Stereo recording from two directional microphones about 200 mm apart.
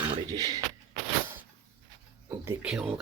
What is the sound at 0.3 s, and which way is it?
Speech, 20° right (ahead or behind).